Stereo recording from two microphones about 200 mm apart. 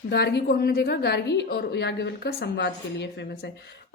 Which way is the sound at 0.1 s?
55° left (ahead or behind).